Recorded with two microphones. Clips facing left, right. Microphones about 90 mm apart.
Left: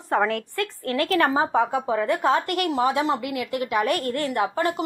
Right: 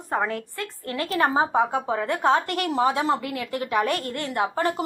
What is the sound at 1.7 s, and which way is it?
A woman's voice, 35° right (ahead or behind).